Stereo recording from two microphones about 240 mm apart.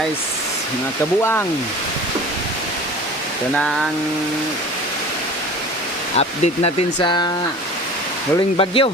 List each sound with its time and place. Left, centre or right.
1.2 s speech: centre
6.1 s speech: left
8.5 s speech: left